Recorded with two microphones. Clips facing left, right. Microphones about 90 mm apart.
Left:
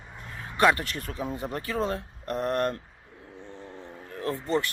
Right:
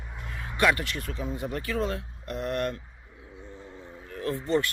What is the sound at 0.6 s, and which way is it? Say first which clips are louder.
Speech: left 2 dB; 35° left (ahead or behind).